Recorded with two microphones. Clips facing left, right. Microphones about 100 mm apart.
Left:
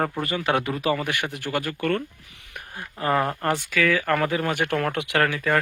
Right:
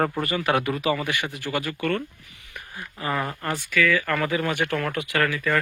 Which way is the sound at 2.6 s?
55° left (ahead or behind).